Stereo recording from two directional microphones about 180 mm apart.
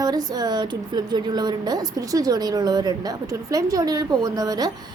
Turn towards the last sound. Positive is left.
turn(degrees=-20)  # may be behind; listen again after turning